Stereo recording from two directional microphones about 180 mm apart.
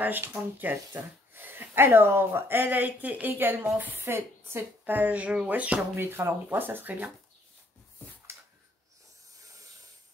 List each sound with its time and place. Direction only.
0.0 s speech: 10° right (ahead or behind)
9.4 s hiss: 20° right (ahead or behind)